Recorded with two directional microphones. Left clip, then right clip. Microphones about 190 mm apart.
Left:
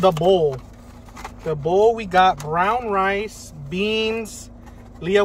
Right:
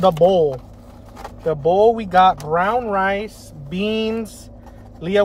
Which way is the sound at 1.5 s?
25° right (ahead or behind).